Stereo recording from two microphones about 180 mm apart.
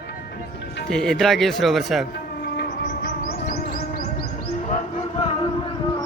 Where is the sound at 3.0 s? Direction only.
55° left (ahead or behind).